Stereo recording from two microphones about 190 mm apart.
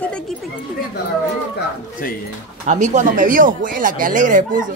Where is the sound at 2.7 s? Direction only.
40° right (ahead or behind).